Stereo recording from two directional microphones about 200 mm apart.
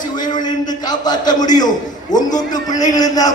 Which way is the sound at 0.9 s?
20° left (ahead or behind).